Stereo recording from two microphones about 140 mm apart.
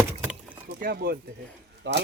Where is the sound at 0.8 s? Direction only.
90° right.